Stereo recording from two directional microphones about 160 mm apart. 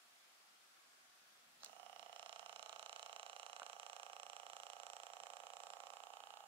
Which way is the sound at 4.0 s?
35° right (ahead or behind).